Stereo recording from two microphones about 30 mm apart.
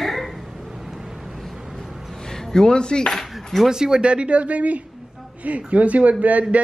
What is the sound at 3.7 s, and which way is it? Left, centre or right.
Speech, right.